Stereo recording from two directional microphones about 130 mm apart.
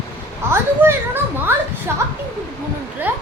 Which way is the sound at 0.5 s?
15° right (ahead or behind).